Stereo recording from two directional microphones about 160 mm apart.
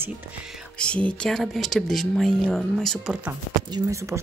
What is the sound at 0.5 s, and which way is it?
Speech, 5° left (ahead or behind).